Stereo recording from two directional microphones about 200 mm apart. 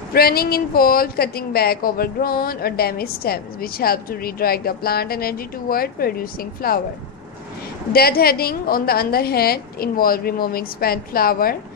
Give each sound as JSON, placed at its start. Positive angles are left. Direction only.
{"t": 0.1, "sound": "a woman's voice", "side_deg": 50}
{"t": 7.9, "sound": "a woman's voice", "side_deg": 50}